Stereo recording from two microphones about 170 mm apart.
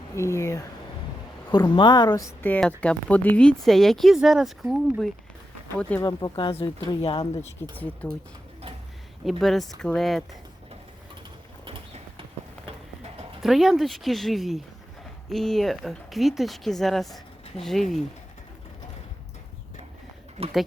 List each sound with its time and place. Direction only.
0.2 s speech: 15° left (ahead or behind)
6.1 s speech: 25° left (ahead or behind)
8.0 s speech: 10° left (ahead or behind)
9.4 s speech: centre (ahead or behind)
13.4 s speech: centre (ahead or behind)